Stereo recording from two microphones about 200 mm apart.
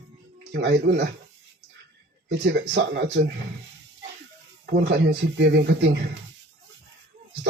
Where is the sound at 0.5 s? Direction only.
55° right (ahead or behind).